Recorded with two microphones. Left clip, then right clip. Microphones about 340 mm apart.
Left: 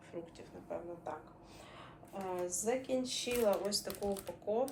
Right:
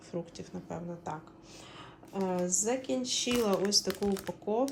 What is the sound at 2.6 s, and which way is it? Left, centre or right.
Speech, right.